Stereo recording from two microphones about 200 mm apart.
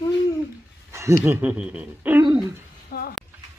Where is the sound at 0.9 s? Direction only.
15° right (ahead or behind).